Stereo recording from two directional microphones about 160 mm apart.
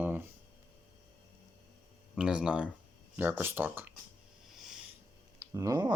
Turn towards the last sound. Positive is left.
turn(degrees=-25)  # may be behind; listen again after turning